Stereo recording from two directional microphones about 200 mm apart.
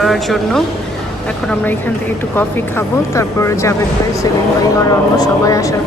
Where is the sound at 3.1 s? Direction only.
15° left (ahead or behind).